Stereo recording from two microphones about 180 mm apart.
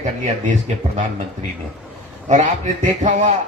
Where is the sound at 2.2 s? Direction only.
40° right (ahead or behind).